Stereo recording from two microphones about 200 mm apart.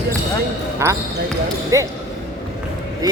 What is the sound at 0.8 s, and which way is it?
Speech, 15° right (ahead or behind).